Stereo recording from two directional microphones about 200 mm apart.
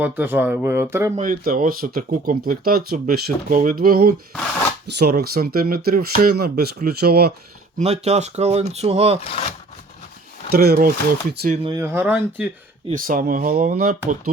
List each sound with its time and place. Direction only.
0.0 s speech: 10° right (ahead or behind)
1.1 s speech: 40° right (ahead or behind)
7.8 s speech: 35° right (ahead or behind)
10.5 s speech: 50° right (ahead or behind)
11.5 s speech: 25° right (ahead or behind)
11.8 s speech: 10° right (ahead or behind)
12.9 s speech: 45° right (ahead or behind)